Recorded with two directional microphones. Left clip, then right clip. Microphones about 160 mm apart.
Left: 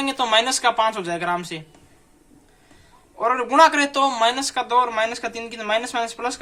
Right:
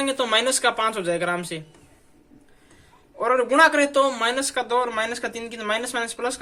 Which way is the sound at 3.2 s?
15° left (ahead or behind).